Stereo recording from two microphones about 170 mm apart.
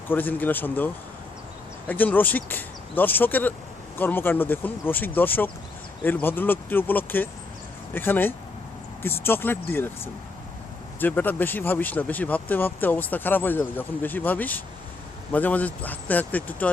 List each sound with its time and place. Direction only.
0.1 s speech: 10° left (ahead or behind)
1.9 s speech: 10° left (ahead or behind)